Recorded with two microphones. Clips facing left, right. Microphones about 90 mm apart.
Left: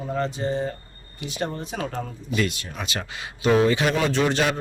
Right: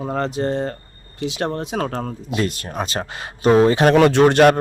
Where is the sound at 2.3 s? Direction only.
40° right (ahead or behind).